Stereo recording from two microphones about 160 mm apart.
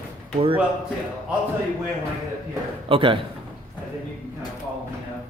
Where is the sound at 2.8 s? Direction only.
35° right (ahead or behind).